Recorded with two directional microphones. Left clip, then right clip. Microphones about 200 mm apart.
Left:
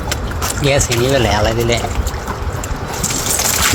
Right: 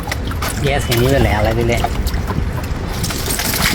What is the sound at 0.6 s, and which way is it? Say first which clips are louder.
Speech: left 2 dB; 30° left (ahead or behind).